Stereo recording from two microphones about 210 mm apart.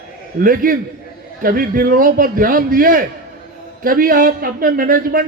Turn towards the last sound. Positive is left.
turn(degrees=-40)  # may be behind; listen again after turning